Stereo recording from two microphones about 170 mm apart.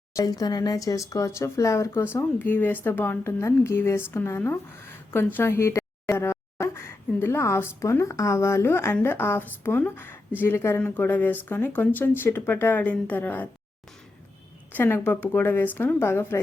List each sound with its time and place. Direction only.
0.2 s speech: 20° left (ahead or behind)
14.7 s speech: 10° left (ahead or behind)